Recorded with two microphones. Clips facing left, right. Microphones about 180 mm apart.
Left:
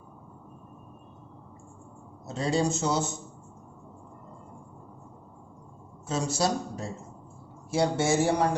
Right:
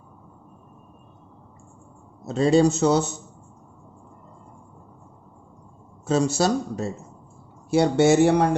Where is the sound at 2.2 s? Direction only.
75° right (ahead or behind).